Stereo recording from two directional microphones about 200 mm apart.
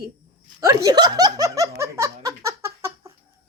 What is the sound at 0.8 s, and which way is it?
Laughter, 20° right (ahead or behind).